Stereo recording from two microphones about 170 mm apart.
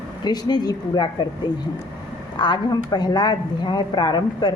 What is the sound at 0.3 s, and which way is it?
Speech, 25° left (ahead or behind).